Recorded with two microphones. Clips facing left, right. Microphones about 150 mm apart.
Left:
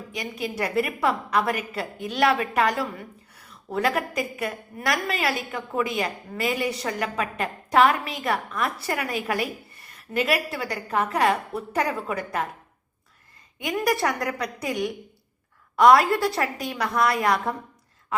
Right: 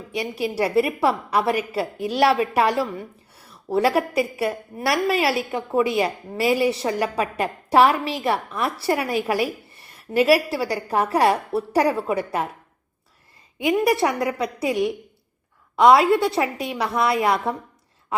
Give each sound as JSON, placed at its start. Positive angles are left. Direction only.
{"t": 0.1, "sound": "a woman's voice", "side_deg": -30}
{"t": 13.7, "sound": "a woman's voice", "side_deg": -25}